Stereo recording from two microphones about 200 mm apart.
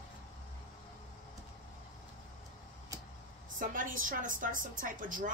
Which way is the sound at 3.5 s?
40° right (ahead or behind).